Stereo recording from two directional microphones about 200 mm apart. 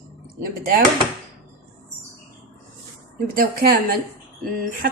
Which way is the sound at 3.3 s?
45° right (ahead or behind).